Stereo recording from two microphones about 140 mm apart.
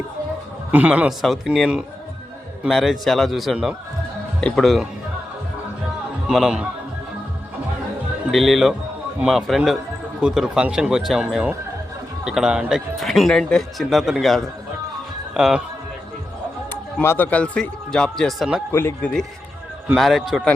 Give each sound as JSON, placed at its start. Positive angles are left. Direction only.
{"t": 0.7, "sound": "speech", "side_deg": -10}
{"t": 4.4, "sound": "speech", "side_deg": 5}
{"t": 6.2, "sound": "speech", "side_deg": -5}
{"t": 8.3, "sound": "speech", "side_deg": 0}
{"t": 17.0, "sound": "speech", "side_deg": 15}
{"t": 18.7, "sound": "speech", "side_deg": 15}
{"t": 20.0, "sound": "speech", "side_deg": 0}